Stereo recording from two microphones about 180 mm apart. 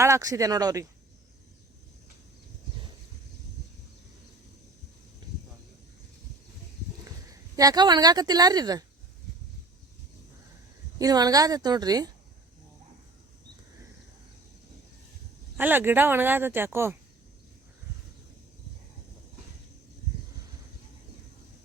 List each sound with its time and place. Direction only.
0.0 s a woman's voice: 15° right (ahead or behind)
5.2 s a sound: 25° right (ahead or behind)
7.0 s speech: 20° right (ahead or behind)
10.9 s a woman's voice: 20° right (ahead or behind)
15.5 s speech: 10° right (ahead or behind)